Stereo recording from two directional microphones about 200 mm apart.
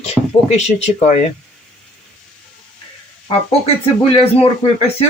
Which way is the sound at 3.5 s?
30° left (ahead or behind).